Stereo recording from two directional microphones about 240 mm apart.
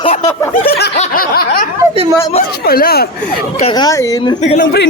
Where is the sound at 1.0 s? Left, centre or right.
Left.